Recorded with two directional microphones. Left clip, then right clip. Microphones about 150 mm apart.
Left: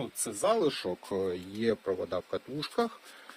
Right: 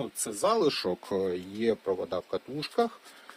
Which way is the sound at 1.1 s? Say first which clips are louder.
Right 2 dB; 25° right (ahead or behind).